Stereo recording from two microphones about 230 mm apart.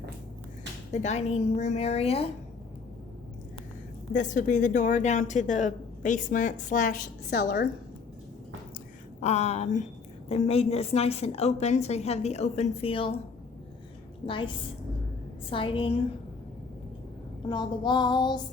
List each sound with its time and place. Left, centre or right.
0.9 s a woman's voice: left
4.1 s a woman's voice: left
9.2 s a woman's voice: left
14.3 s a woman's voice: left
17.5 s a woman's voice: centre